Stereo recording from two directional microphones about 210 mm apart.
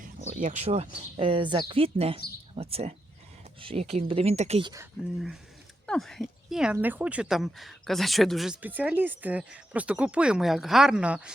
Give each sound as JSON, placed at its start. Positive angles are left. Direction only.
{"t": 0.0, "sound": "speech", "side_deg": -40}
{"t": 5.1, "sound": "speech", "side_deg": 0}